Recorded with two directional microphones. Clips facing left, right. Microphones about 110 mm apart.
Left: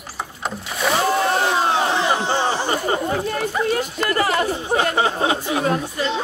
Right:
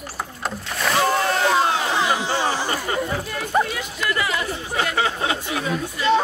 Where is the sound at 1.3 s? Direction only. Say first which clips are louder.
Left 1 dB; 30° left (ahead or behind).